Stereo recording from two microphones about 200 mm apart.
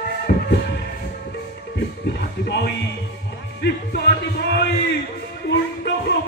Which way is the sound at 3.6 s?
55° left (ahead or behind).